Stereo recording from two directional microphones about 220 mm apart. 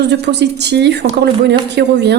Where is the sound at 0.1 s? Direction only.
50° right (ahead or behind).